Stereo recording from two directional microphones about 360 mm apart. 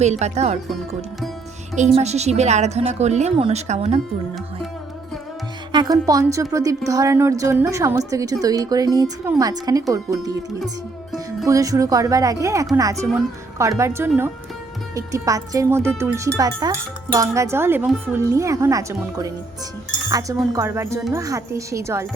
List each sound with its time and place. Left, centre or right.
0.0 s speech: centre
2.0 s speech: centre
5.7 s speech: centre